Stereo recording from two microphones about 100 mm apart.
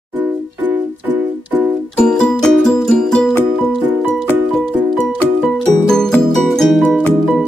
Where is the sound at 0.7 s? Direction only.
15° right (ahead or behind).